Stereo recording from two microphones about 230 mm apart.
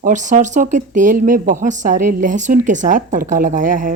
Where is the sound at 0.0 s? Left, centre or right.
Right.